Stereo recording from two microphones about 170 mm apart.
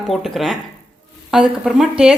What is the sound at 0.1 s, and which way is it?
Speech, centre (ahead or behind).